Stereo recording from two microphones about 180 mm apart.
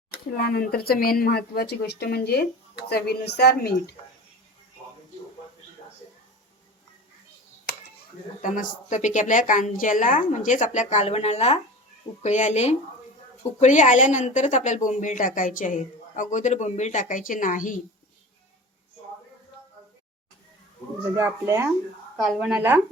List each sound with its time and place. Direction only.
0.3 s speech: 60° left (ahead or behind)
8.4 s a woman's voice: 45° left (ahead or behind)
21.2 s a child's voice: 15° right (ahead or behind)
22.2 s speech: centre (ahead or behind)